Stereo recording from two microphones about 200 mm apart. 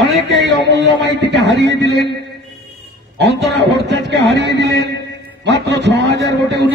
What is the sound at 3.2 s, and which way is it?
A man's voice, 60° right (ahead or behind).